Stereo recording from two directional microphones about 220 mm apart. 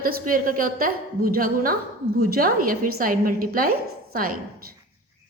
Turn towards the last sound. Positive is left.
turn(degrees=-40)  # may be behind; listen again after turning